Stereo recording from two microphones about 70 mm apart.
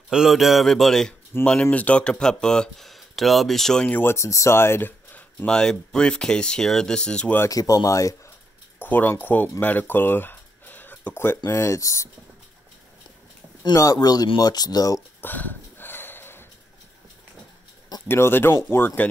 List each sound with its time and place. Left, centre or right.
0.1 s a man's voice: centre
1.4 s speech: centre
4.0 s speech: left
5.5 s speech: centre
7.4 s speech: left
8.7 s keys jangling: left
9.2 s speech: left
11.4 s speech: left
13.7 s speech: left
15.1 s a sound: left
18.0 s speech: left